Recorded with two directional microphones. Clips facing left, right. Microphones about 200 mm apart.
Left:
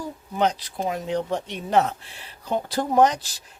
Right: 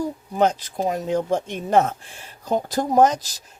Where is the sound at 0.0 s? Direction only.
45° right (ahead or behind).